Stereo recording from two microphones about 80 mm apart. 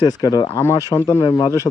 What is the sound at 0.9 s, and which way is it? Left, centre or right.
Speech, left.